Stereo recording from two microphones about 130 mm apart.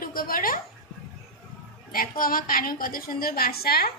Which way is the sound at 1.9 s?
90° left.